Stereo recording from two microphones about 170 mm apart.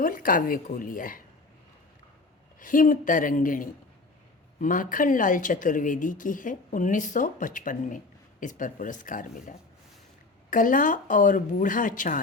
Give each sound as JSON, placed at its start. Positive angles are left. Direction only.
{"t": 0.0, "sound": "speech", "side_deg": 55}
{"t": 2.6, "sound": "speech", "side_deg": 50}